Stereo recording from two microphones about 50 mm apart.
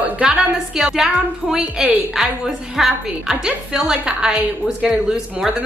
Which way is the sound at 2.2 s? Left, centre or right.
Centre.